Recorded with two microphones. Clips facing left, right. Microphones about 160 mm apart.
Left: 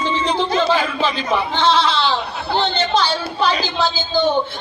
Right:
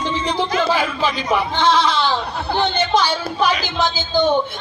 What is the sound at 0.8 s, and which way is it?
A woman's voice, 10° right (ahead or behind).